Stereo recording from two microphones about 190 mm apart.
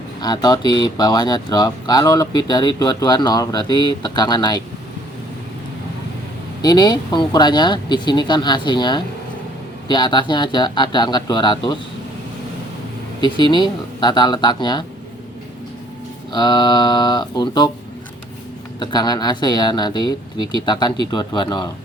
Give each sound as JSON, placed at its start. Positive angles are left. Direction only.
{"t": 0.2, "sound": "speech", "side_deg": 20}
{"t": 6.6, "sound": "speech", "side_deg": 20}
{"t": 13.2, "sound": "speech", "side_deg": 25}
{"t": 16.3, "sound": "speech", "side_deg": 25}
{"t": 18.8, "sound": "speech", "side_deg": 20}